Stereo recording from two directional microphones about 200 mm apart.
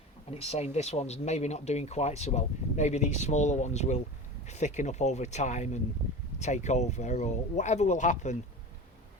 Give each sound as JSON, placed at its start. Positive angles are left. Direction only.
{"t": 0.3, "sound": "speech", "side_deg": 30}